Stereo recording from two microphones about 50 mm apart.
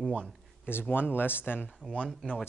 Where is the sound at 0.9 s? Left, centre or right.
Left.